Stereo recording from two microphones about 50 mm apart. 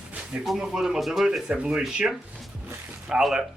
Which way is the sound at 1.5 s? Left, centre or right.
Centre.